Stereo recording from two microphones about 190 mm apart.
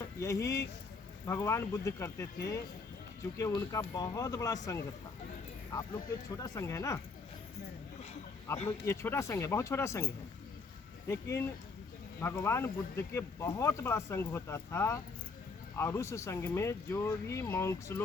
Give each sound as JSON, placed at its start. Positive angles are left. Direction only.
{"t": 0.2, "sound": "speech", "side_deg": 15}
{"t": 3.3, "sound": "speech", "side_deg": 15}
{"t": 8.5, "sound": "speech", "side_deg": 15}
{"t": 11.1, "sound": "speech", "side_deg": 15}